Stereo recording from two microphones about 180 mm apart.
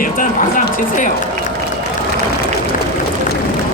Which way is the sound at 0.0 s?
50° left (ahead or behind).